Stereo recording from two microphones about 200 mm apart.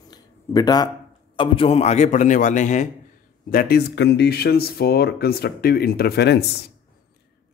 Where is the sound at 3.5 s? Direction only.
45° left (ahead or behind).